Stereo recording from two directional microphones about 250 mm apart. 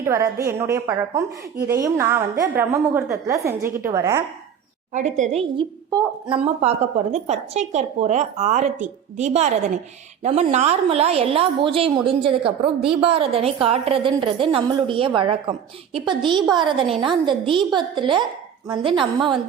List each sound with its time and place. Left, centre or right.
0.0 s a woman's voice: centre
4.9 s a woman's voice: right